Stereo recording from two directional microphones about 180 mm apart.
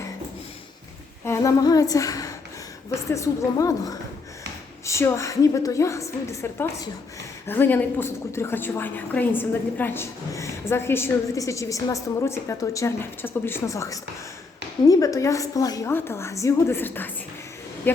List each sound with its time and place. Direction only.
1.2 s a woman's voice: 15° left (ahead or behind)